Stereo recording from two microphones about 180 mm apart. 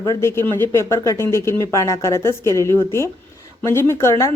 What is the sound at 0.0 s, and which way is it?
A woman's voice, 15° left (ahead or behind).